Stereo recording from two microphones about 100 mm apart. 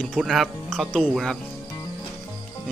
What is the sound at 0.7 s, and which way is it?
Speech, 10° left (ahead or behind).